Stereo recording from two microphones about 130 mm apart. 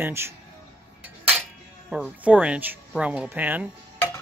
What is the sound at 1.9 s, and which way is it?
Speech, 10° right (ahead or behind).